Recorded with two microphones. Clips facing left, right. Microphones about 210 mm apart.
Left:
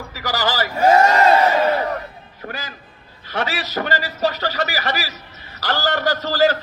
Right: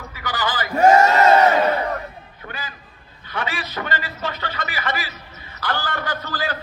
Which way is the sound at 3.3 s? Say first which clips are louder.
Left 4 dB; 40° left (ahead or behind).